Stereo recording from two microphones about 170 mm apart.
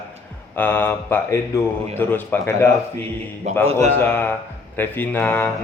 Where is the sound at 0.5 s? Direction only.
10° left (ahead or behind).